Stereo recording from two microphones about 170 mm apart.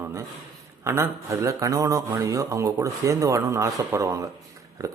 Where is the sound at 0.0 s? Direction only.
15° right (ahead or behind).